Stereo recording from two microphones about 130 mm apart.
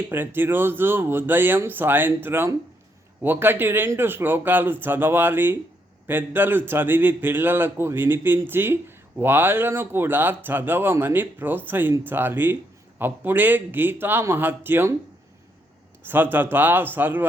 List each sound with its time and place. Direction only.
0.1 s a man's voice: 15° right (ahead or behind)
16.0 s a man's voice: 15° right (ahead or behind)